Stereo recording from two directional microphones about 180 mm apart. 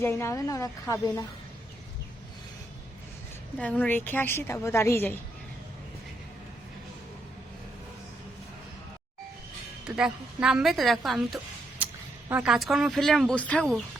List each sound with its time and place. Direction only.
0.0 s a woman's voice: 15° left (ahead or behind)
3.6 s a woman's voice: 10° left (ahead or behind)
9.8 s a woman's voice: 5° right (ahead or behind)